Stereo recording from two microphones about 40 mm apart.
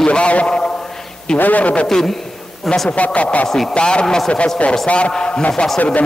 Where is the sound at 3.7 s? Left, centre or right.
Left.